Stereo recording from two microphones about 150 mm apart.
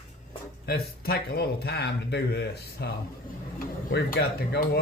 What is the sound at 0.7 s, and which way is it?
Speech, 90° left.